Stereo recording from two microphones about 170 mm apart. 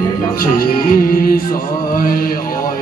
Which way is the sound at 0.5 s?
55° left (ahead or behind).